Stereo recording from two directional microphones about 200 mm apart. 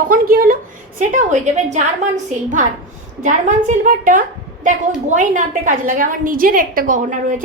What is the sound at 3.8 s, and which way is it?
A woman's voice, 40° right (ahead or behind).